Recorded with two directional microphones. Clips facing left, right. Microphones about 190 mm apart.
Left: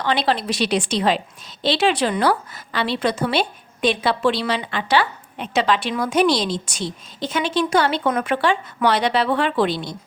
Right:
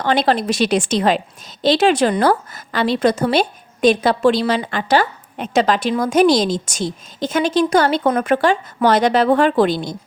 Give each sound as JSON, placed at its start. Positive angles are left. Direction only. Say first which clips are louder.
{"t": 0.0, "sound": "a woman's voice", "louder": "right 4 dB", "side_deg": -45}